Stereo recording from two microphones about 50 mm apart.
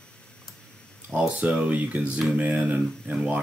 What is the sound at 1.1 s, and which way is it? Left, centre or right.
Speech, centre.